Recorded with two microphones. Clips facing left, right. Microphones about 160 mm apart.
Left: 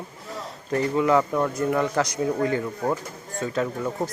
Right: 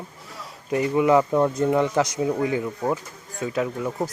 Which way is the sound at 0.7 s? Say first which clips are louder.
Right 2 dB; 15° right (ahead or behind).